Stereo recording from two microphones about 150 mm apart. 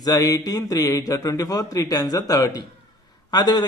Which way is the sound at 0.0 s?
25° left (ahead or behind).